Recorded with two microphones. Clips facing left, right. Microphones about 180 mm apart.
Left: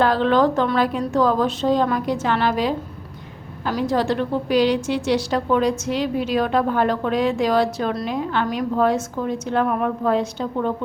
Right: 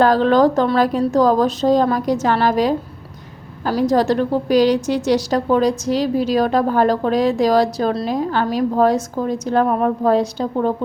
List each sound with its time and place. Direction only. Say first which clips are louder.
0.0 s a woman's voice: right 4 dB; 40° right (ahead or behind)